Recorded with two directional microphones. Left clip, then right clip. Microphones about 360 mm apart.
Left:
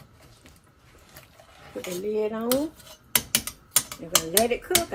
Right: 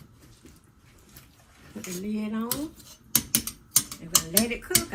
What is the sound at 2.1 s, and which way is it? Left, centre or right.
Speech, right.